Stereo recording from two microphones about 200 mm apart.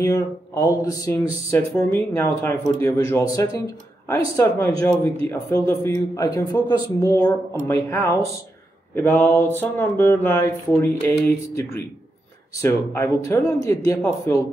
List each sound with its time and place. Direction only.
0.0 s a man's voice: 15° left (ahead or behind)